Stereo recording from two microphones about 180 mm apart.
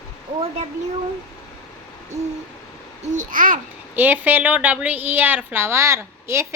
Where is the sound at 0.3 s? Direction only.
35° right (ahead or behind).